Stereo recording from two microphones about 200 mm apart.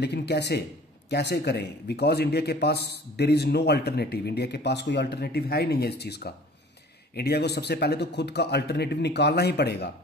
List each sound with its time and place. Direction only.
0.0 s a man's voice: 55° left (ahead or behind)